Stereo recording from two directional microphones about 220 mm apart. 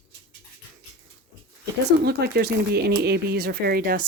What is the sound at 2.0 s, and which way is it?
Speech, 45° right (ahead or behind).